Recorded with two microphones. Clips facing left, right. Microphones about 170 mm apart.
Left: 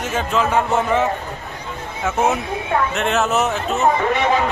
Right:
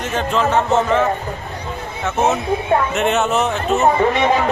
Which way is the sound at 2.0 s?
10° left (ahead or behind).